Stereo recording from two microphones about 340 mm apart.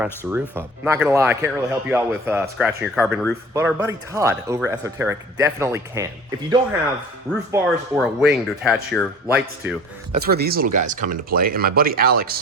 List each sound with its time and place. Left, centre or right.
0.0 s a man's voice: centre
7.3 s speech: centre
10.1 s speech: right